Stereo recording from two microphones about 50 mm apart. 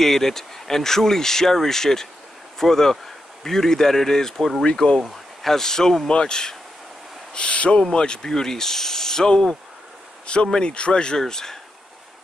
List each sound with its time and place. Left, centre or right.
0.0 s speech: centre